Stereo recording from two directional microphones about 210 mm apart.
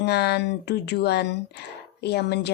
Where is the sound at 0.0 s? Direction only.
50° left (ahead or behind).